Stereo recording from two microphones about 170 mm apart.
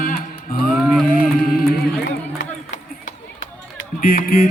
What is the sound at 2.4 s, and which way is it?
Run, 90° left.